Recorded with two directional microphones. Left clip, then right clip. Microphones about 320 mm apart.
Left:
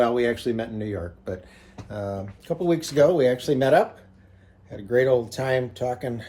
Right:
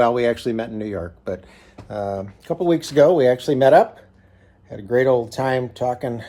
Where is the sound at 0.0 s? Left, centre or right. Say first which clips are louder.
Right 4 dB; right.